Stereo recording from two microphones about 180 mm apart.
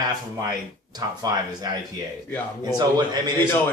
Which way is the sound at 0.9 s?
20° right (ahead or behind).